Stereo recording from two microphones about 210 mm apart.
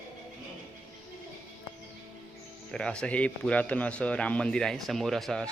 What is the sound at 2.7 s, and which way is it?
A man's voice, 5° left (ahead or behind).